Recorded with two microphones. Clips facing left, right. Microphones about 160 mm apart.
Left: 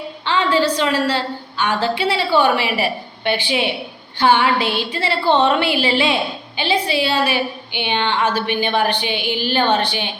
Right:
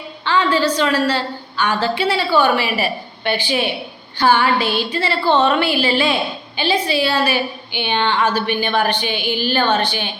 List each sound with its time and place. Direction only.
0.3 s a woman's voice: 25° left (ahead or behind)